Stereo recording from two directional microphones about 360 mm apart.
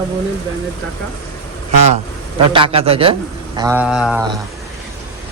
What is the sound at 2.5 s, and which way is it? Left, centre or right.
A man's voice, centre.